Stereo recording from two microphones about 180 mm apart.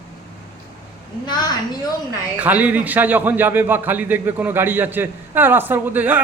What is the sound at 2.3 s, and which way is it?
A man's voice, 10° right (ahead or behind).